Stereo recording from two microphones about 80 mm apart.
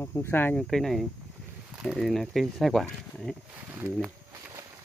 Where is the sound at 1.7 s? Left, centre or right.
Centre.